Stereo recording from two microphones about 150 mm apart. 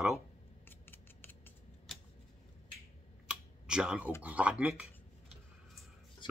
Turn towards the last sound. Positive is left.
turn(degrees=-10)  # may be behind; listen again after turning